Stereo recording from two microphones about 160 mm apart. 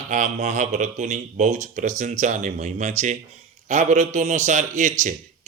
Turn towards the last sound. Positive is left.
turn(degrees=-50)  # may be behind; listen again after turning